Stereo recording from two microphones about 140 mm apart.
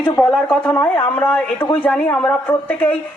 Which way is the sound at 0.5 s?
10° left (ahead or behind).